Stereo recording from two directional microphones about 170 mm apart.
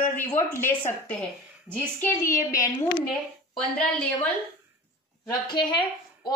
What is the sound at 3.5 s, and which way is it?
Speech, 5° left (ahead or behind).